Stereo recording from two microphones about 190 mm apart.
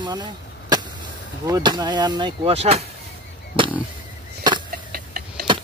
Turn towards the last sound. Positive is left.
turn(degrees=-50)  # may be behind; listen again after turning